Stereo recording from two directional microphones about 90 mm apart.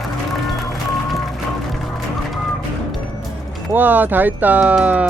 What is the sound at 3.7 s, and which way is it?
Speech, 20° right (ahead or behind).